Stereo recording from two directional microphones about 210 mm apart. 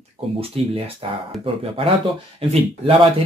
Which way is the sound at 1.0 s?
25° right (ahead or behind).